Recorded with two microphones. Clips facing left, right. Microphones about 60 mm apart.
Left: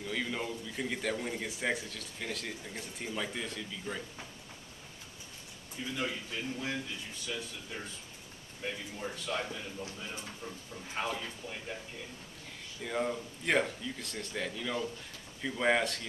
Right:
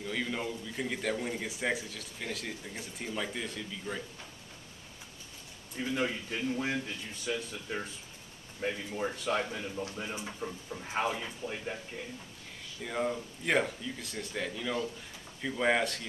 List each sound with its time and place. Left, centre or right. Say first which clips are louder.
0.0 s a man's voice: right 1 dB; centre
5.9 s speech: right 3 dB; right
8.6 s speech: right 5 dB; right
12.8 s a man's voice: right 1 dB; centre